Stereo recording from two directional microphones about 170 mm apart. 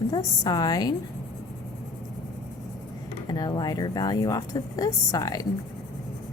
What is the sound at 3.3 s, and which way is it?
A woman's voice, 25° left (ahead or behind).